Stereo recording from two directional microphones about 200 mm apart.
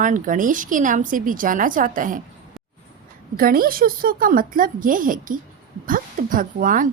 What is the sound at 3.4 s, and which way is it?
A woman's voice, 45° right (ahead or behind).